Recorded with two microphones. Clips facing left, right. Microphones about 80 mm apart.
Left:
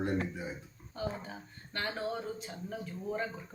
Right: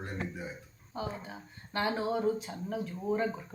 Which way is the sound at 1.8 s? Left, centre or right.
Centre.